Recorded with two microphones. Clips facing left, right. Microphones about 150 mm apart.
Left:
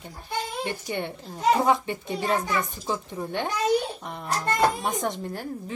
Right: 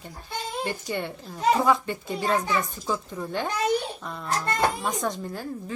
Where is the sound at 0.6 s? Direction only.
20° left (ahead or behind).